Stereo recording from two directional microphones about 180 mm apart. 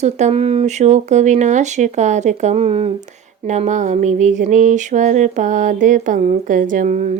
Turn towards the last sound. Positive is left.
turn(degrees=-45)  # may be behind; listen again after turning